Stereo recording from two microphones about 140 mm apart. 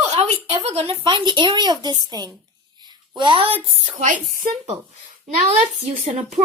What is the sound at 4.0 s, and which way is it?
Speech, 70° right (ahead or behind).